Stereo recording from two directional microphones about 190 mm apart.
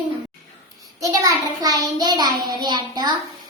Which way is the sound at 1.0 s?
20° right (ahead or behind).